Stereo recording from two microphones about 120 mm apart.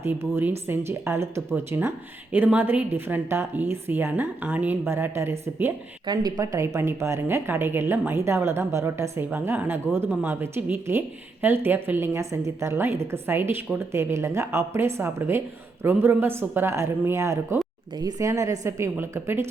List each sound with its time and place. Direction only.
0.0 s a woman's voice: 20° right (ahead or behind)
6.1 s speech: 30° right (ahead or behind)